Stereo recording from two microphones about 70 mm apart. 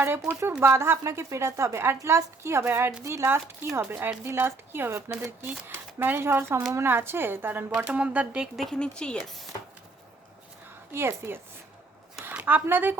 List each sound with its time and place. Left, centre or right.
0.6 s a woman's voice: right
3.0 s speech: right
3.2 s a woman's voice: right
5.4 s a woman's voice: right
7.7 s speech: centre
8.7 s speech: centre
10.9 s a woman's voice: right
12.3 s speech: right